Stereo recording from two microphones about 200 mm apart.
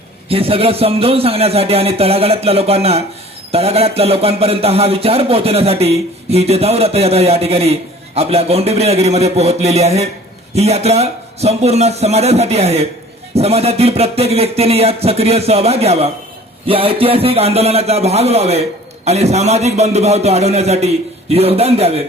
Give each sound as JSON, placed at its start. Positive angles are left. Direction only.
{"t": 0.3, "sound": "a man's voice", "side_deg": -30}